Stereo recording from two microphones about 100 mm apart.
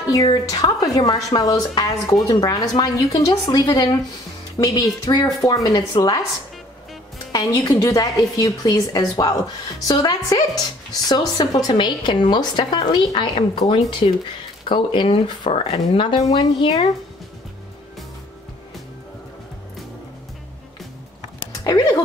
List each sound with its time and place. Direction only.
0.0 s a woman's voice: 35° left (ahead or behind)
7.3 s a woman's voice: 40° left (ahead or behind); by 15.5 s 55° left (ahead or behind)
15.5 s a woman's voice: 65° left (ahead or behind)
21.6 s speech: 40° left (ahead or behind)